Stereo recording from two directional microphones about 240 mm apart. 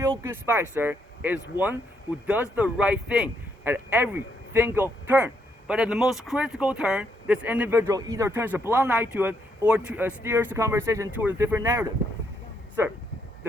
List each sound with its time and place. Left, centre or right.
0.2 s a man's voice: centre